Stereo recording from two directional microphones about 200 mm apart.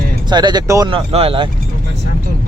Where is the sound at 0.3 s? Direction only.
20° right (ahead or behind).